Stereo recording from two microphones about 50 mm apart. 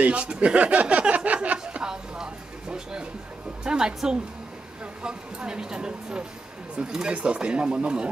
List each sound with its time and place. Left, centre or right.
0.0 s speech: right
1.7 s music: centre
3.6 s a woman's voice: centre